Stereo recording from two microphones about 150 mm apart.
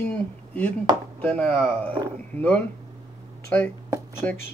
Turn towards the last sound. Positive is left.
turn(degrees=10)  # may be behind; listen again after turning